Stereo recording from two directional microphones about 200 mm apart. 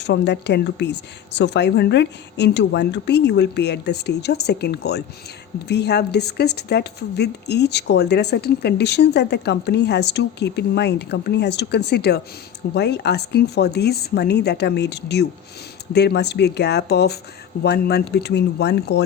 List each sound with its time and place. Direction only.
0.0 s speech: 60° left (ahead or behind)